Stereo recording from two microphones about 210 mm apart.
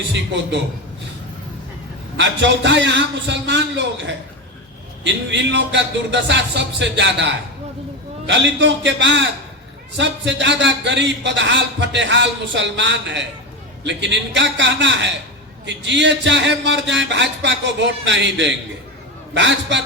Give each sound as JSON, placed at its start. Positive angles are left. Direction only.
{"t": 2.1, "sound": "a man's voice", "side_deg": -60}